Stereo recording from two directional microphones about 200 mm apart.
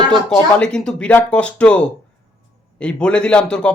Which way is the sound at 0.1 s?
5° left (ahead or behind).